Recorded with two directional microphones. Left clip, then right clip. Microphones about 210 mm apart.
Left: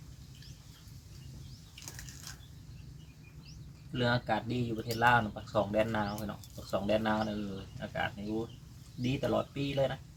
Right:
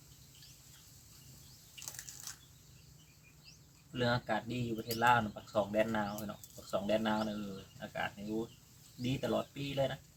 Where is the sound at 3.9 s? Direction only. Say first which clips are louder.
Left 3 dB; 15° left (ahead or behind).